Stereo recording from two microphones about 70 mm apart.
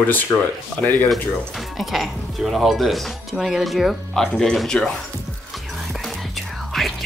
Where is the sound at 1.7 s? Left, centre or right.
Centre.